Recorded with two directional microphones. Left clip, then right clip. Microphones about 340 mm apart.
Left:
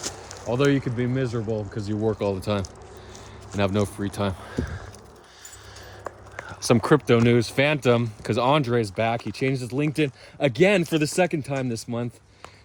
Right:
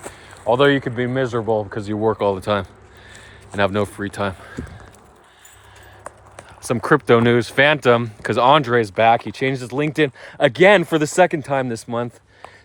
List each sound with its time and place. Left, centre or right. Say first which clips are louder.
0.4 s speech: right 7 dB; centre
6.7 s speech: left 1 dB; centre
6.9 s speech: right 7 dB; centre